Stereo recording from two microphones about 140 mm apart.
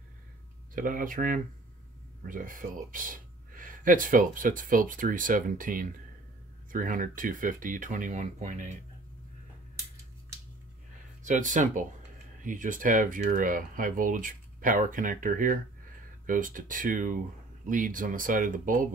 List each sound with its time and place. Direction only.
0.7 s speech: 80° right; by 8.7 s 65° right (ahead or behind)
11.2 s speech: 65° right (ahead or behind)